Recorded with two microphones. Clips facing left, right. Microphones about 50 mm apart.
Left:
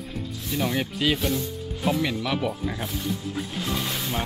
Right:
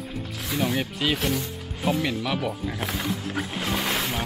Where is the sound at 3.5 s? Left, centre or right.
Right.